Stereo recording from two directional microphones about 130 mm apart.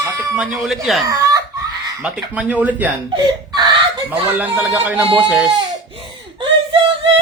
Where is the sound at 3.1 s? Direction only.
35° right (ahead or behind).